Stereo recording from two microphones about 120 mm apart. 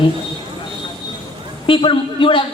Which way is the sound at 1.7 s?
45° left (ahead or behind).